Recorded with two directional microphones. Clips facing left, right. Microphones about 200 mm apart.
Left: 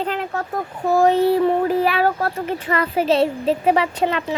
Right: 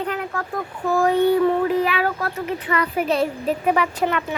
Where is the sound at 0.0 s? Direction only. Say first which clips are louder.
Left 2 dB; 25° left (ahead or behind).